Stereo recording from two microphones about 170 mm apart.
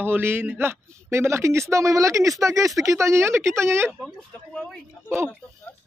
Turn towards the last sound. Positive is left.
turn(degrees=5)  # may be behind; listen again after turning